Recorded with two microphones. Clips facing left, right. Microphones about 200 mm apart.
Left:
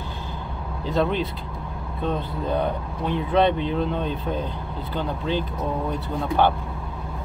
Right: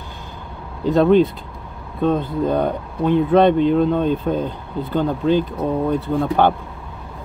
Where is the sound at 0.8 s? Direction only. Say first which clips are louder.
Right 10 dB; 50° right (ahead or behind).